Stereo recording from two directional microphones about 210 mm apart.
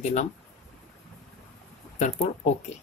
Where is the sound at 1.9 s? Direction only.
35° left (ahead or behind).